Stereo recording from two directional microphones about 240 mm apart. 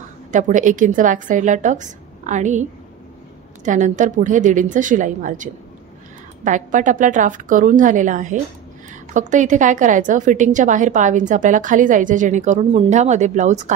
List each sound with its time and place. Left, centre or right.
0.3 s a woman's voice: right
3.6 s a woman's voice: right